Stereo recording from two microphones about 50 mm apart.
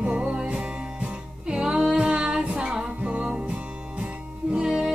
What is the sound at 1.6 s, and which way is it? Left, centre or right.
Music, centre.